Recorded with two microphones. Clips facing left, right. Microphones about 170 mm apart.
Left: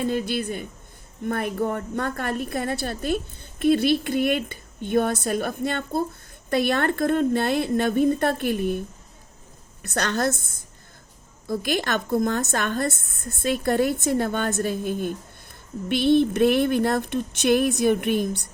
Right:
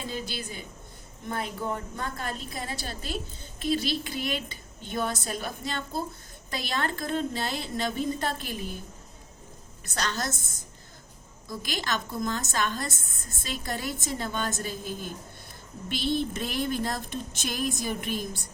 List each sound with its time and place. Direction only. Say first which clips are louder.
0.0 s a woman's voice: left 10 dB; 55° left (ahead or behind)
9.8 s a woman's voice: left 8 dB; 60° left (ahead or behind)